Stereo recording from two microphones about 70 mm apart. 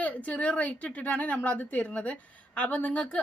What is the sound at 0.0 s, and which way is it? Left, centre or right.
A woman's voice, centre.